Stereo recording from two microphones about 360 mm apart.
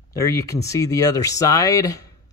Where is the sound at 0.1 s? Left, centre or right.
Centre.